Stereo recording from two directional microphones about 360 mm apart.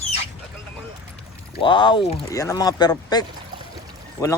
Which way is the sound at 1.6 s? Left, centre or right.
Centre.